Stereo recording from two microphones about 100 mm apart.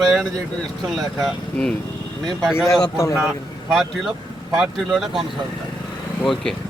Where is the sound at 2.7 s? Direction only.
30° left (ahead or behind).